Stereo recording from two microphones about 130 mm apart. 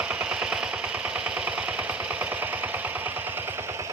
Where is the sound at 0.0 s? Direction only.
10° right (ahead or behind).